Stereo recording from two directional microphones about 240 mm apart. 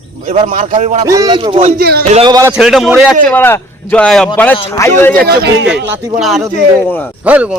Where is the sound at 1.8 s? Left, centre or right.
Right.